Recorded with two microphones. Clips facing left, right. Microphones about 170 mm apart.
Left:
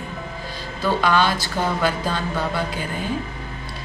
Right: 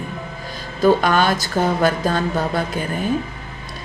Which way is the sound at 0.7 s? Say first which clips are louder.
Right 4 dB; 45° right (ahead or behind).